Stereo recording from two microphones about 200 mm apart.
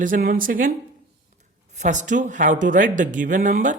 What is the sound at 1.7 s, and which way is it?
Speech, 35° right (ahead or behind).